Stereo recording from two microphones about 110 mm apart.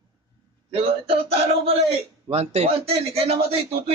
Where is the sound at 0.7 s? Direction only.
55° right (ahead or behind).